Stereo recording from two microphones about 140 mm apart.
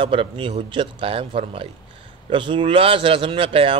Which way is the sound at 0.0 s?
40° right (ahead or behind).